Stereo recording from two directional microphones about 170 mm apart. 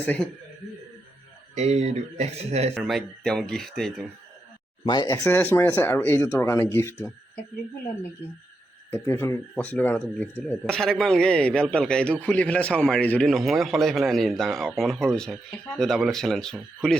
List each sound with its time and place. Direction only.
1.5 s speech: 40° right (ahead or behind)
2.8 s a man's voice: centre (ahead or behind)
4.9 s speech: 20° left (ahead or behind)
8.9 s a man's voice: 15° left (ahead or behind)